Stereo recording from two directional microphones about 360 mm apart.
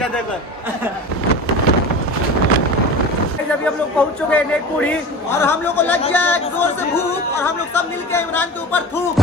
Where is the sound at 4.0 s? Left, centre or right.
Centre.